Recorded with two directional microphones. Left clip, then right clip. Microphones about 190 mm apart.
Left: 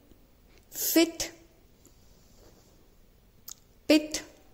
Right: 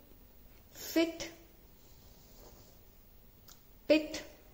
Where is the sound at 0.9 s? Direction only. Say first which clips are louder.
Left 7 dB; 50° left (ahead or behind).